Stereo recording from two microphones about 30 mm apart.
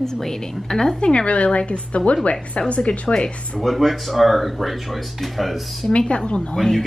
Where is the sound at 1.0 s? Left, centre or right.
Left.